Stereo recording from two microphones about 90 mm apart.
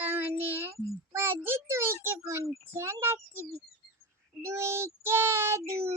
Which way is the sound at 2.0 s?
30° right (ahead or behind).